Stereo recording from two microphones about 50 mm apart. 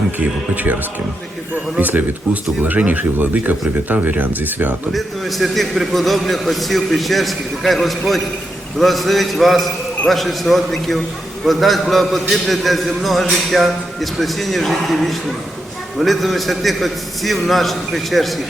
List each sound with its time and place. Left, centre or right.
0.2 s speech: right
4.9 s a man's voice: centre